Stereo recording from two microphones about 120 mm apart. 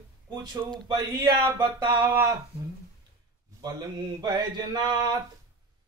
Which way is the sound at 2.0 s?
20° right (ahead or behind).